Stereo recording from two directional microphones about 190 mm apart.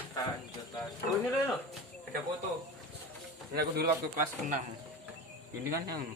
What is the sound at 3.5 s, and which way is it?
Speech, 60° right (ahead or behind).